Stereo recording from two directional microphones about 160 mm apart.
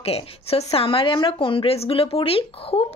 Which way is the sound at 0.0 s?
40° left (ahead or behind).